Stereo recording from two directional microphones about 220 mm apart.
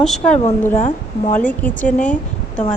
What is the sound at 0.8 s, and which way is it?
Speech, 35° left (ahead or behind).